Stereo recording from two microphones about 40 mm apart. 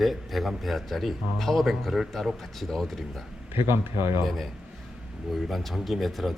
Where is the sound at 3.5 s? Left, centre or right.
Right.